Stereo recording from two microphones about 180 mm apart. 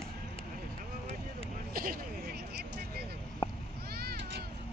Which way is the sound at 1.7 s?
55° right (ahead or behind).